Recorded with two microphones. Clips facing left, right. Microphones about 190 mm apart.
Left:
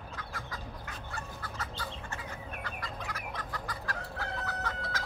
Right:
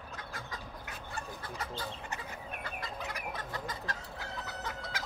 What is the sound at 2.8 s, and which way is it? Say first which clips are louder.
Chicken: right 1 dB; 25° right (ahead or behind).